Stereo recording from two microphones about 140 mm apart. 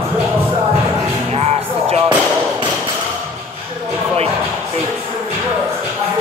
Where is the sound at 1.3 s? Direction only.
45° right (ahead or behind).